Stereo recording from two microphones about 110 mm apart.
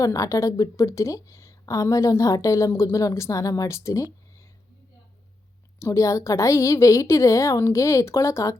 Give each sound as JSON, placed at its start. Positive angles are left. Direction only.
{"t": 0.0, "sound": "a woman's voice", "side_deg": 30}
{"t": 5.8, "sound": "a woman's voice", "side_deg": 30}